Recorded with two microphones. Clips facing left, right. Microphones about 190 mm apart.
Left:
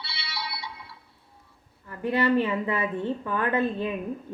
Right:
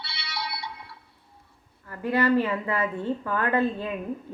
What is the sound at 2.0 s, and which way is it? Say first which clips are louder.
A woman's voice: right 1 dB; 20° left (ahead or behind).